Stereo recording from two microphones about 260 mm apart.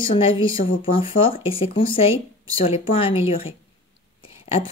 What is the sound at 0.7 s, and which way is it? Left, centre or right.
A woman's voice, centre.